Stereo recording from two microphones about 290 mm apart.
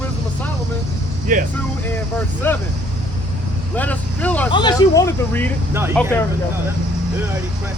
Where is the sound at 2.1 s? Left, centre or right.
Centre.